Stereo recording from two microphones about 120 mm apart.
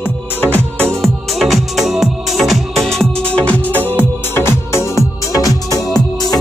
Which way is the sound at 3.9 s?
15° left (ahead or behind).